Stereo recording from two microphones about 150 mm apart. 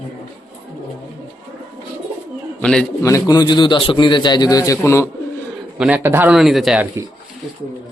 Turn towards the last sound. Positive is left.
turn(degrees=0)  # may be behind; listen again after turning